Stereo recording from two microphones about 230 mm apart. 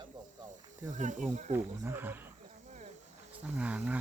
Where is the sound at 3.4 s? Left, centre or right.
Centre.